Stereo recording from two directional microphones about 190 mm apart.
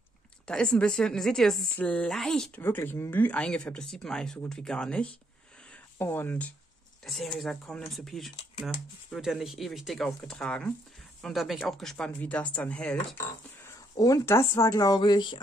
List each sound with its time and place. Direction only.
0.5 s a woman's voice: 5° left (ahead or behind)
13.9 s speech: 20° left (ahead or behind)